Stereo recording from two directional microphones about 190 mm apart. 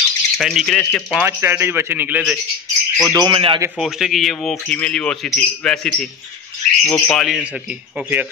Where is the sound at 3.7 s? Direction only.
Centre (ahead or behind).